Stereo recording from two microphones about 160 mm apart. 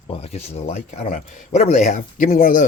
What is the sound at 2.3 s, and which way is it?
Speech, 60° left (ahead or behind).